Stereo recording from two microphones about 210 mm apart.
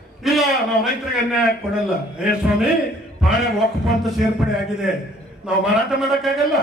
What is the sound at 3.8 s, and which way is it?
Speech, centre (ahead or behind).